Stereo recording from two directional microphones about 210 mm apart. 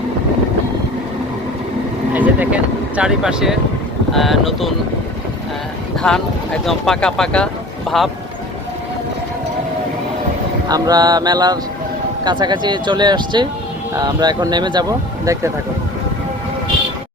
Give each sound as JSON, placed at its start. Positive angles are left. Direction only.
{"t": 2.1, "sound": "speech", "side_deg": -5}
{"t": 6.0, "sound": "speech", "side_deg": 5}
{"t": 10.7, "sound": "speech", "side_deg": -20}